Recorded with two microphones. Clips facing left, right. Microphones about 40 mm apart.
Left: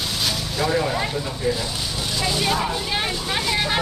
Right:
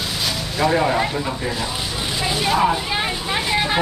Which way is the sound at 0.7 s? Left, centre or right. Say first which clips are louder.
Right 3 dB; right.